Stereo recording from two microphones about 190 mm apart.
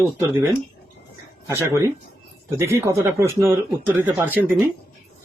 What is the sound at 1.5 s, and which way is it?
Speech, 15° right (ahead or behind).